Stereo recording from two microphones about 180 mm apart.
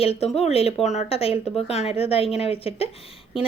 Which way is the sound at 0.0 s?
35° left (ahead or behind).